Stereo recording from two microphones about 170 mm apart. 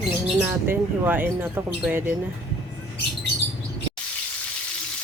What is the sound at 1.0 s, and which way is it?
Speech, 10° right (ahead or behind).